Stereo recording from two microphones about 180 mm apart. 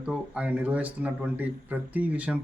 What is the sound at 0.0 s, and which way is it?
A man's voice, 5° right (ahead or behind).